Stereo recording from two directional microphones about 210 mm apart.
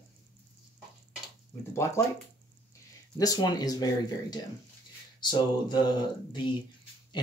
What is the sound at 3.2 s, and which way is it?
Speech, 20° left (ahead or behind).